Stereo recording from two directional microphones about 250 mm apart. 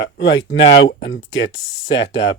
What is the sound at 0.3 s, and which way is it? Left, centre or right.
Speech, left.